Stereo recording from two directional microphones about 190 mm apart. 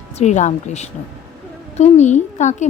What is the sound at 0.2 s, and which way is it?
A woman's voice, 35° left (ahead or behind).